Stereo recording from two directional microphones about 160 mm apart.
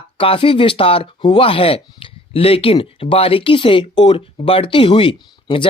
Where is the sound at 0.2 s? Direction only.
35° left (ahead or behind).